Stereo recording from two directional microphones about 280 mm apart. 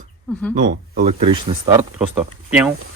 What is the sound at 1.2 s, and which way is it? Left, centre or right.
Speech, centre.